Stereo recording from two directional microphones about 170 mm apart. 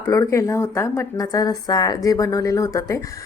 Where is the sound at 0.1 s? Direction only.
20° left (ahead or behind).